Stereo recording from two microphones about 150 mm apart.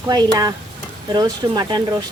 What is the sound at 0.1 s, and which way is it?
Speech, 30° right (ahead or behind).